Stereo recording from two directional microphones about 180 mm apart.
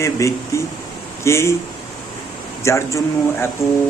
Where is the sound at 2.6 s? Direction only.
15° left (ahead or behind).